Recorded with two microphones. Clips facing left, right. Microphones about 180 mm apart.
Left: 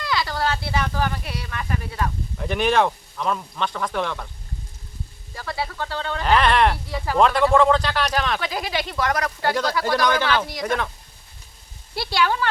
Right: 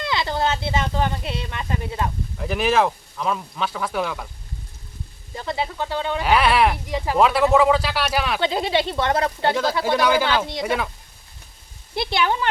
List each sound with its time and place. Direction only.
0.0 s speech: 25° right (ahead or behind)
2.4 s speech: centre (ahead or behind)
5.3 s speech: 20° right (ahead or behind); by 6.7 s 5° right (ahead or behind)
6.8 s speech: 15° right (ahead or behind)
7.2 s speech: 5° right (ahead or behind)
8.4 s speech: 25° right (ahead or behind)
9.8 s speech: 5° right (ahead or behind)
10.4 s speech: 25° right (ahead or behind)
11.9 s speech: 20° right (ahead or behind)